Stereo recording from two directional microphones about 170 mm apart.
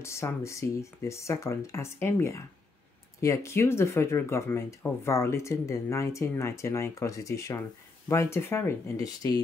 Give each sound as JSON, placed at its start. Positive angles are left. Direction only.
{"t": 0.0, "sound": "speech", "side_deg": 15}